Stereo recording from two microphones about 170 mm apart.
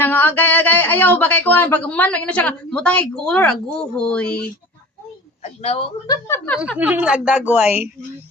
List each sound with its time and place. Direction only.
0.0 s speech: 10° left (ahead or behind)
5.4 s speech: 35° left (ahead or behind)
6.1 s speech: 15° left (ahead or behind)
6.7 s a woman's voice: 10° right (ahead or behind)